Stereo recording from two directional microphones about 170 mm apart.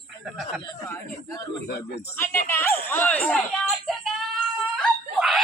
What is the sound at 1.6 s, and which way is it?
Speech, 70° left (ahead or behind).